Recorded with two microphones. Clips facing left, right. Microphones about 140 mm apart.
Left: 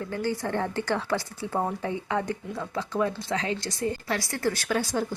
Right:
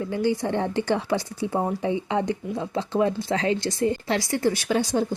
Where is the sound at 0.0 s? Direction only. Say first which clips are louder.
Right 5 dB; 15° right (ahead or behind).